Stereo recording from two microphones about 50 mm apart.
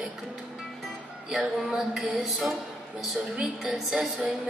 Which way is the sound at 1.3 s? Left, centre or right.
Centre.